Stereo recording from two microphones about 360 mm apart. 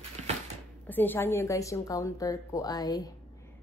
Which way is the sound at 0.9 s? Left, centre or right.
Centre.